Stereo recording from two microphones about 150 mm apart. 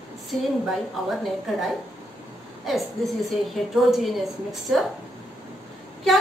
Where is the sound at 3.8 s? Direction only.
Centre (ahead or behind).